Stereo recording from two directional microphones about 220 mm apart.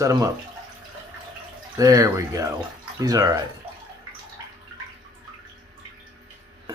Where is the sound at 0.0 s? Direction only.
15° right (ahead or behind).